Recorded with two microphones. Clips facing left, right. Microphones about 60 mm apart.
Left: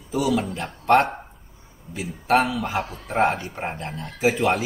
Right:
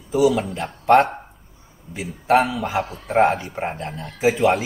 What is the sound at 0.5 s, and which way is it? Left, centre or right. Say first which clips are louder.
Speech: right 3 dB; centre.